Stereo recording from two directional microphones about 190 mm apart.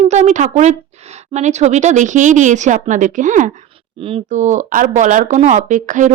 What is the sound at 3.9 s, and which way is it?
Speech, 30° right (ahead or behind).